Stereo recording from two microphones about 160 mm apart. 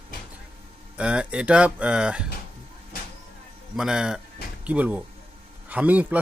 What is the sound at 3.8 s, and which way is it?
Speech, 5° right (ahead or behind).